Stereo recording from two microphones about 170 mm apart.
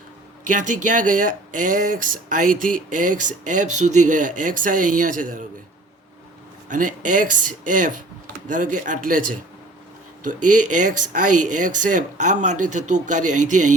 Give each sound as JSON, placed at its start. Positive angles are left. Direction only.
{"t": 0.4, "sound": "speech", "side_deg": -50}
{"t": 6.7, "sound": "speech", "side_deg": -50}